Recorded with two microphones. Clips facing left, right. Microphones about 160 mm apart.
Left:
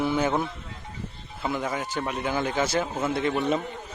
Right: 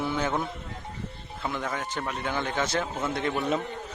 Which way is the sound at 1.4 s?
10° left (ahead or behind).